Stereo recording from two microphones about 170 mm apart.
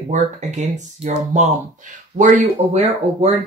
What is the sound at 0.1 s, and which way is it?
Speech, 45° right (ahead or behind).